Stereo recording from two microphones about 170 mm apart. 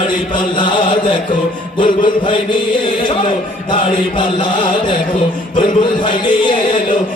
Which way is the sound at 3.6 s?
30° left (ahead or behind).